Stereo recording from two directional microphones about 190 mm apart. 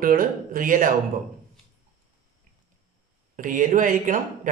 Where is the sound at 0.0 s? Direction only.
50° right (ahead or behind).